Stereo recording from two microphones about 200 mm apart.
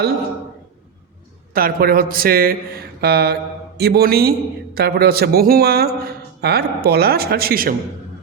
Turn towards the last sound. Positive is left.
turn(degrees=-50)  # may be behind; listen again after turning